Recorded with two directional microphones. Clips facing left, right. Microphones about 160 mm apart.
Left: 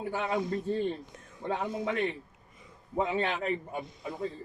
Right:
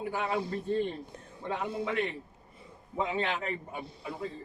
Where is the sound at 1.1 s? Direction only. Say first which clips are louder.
Right 3 dB; 30° right (ahead or behind).